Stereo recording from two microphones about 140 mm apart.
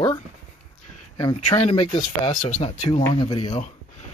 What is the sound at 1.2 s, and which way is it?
Speech, 35° left (ahead or behind).